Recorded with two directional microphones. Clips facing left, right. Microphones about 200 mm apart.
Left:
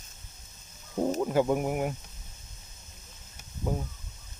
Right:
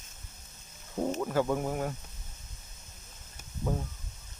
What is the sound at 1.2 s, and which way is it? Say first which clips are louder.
Speech: left 4 dB; 20° left (ahead or behind).